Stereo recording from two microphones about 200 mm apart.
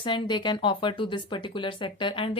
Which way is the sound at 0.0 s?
25° left (ahead or behind).